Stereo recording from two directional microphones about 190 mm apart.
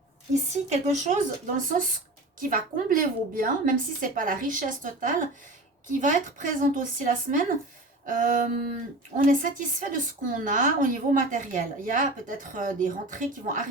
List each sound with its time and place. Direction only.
0.5 s a woman's voice: 40° right (ahead or behind)